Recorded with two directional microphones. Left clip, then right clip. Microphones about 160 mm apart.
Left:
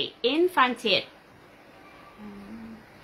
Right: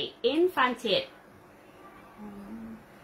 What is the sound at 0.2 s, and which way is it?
Speech, 25° left (ahead or behind).